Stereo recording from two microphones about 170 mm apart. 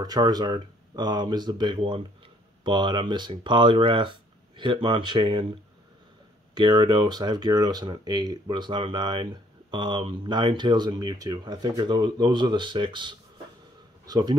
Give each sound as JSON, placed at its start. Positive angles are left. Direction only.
{"t": 0.0, "sound": "speech", "side_deg": -20}
{"t": 6.5, "sound": "speech", "side_deg": -25}